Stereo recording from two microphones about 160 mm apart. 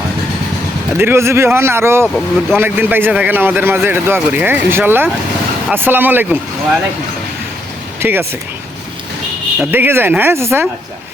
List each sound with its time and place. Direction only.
0.9 s a man's voice: 15° right (ahead or behind)
8.0 s a man's voice: 15° right (ahead or behind)
9.6 s a man's voice: 15° right (ahead or behind)